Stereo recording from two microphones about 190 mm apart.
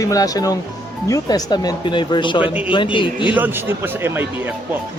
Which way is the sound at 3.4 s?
10° right (ahead or behind).